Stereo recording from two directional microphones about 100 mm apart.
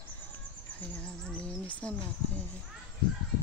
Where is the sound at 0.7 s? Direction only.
10° left (ahead or behind).